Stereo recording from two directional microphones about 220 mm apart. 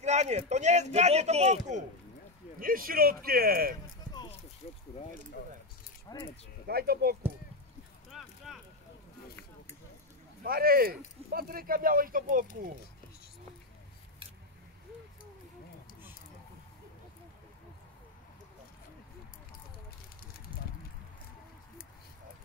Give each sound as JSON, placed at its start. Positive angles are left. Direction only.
{"t": 0.0, "sound": "speech", "side_deg": -30}
{"t": 2.6, "sound": "a man's voice", "side_deg": -40}
{"t": 3.8, "sound": "run", "side_deg": 15}
{"t": 4.6, "sound": "speech", "side_deg": 30}
{"t": 6.1, "sound": "speech", "side_deg": 15}
{"t": 6.7, "sound": "a man's voice", "side_deg": -45}
{"t": 8.1, "sound": "a sound", "side_deg": 0}
{"t": 10.4, "sound": "speech", "side_deg": -40}